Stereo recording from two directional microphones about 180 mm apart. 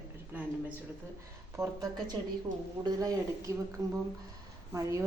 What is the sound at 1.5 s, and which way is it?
A woman's voice, 15° right (ahead or behind).